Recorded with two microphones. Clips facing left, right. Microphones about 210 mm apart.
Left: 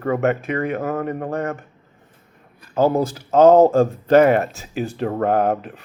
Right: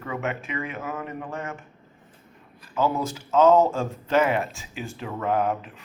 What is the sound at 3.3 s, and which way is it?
Speech, 60° left (ahead or behind).